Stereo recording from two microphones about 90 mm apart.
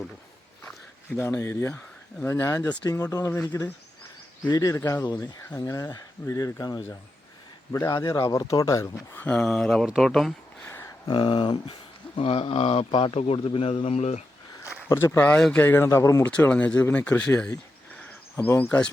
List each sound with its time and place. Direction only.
1.1 s speech: 30° left (ahead or behind)
2.6 s speech: 45° left (ahead or behind)
7.9 s speech: 45° left (ahead or behind); by 9.3 s 25° left (ahead or behind)
9.3 s speech: 5° left (ahead or behind)
9.8 s speech: 5° right (ahead or behind)
10.6 s a sound: 25° left (ahead or behind)
11.1 s speech: 65° left (ahead or behind)
12.1 s speech: 90° left
14.6 s a sound: 30° left (ahead or behind)
15.5 s a man's voice: 20° left (ahead or behind)
16.2 s speech: 20° left (ahead or behind)
18.3 s a man's voice: 25° left (ahead or behind)